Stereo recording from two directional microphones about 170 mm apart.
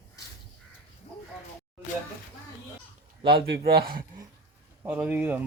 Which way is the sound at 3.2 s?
65° right (ahead or behind).